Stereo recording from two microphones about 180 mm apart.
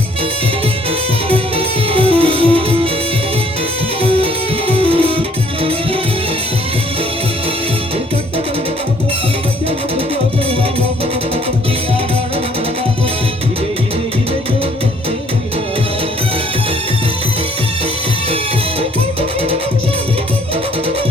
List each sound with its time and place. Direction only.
1.3 s music: 30° right (ahead or behind)
4.7 s music: 30° right (ahead or behind)